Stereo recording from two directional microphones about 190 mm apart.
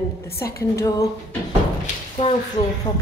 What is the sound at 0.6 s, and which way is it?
Speech, 15° left (ahead or behind).